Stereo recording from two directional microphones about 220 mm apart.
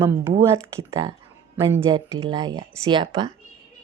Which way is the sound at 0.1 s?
10° right (ahead or behind).